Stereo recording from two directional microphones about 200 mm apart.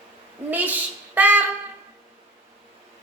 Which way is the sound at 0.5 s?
10° right (ahead or behind).